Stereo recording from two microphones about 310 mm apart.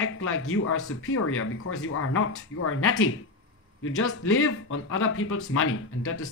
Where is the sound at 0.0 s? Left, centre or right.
Left.